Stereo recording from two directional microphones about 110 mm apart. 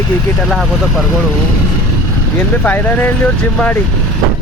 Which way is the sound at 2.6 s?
15° left (ahead or behind).